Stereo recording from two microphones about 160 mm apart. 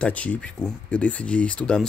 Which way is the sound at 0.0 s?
10° left (ahead or behind).